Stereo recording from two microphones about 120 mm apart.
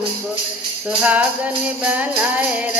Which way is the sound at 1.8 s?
15° right (ahead or behind).